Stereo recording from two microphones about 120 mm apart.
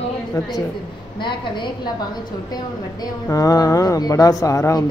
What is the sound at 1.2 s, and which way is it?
Speech, 40° left (ahead or behind).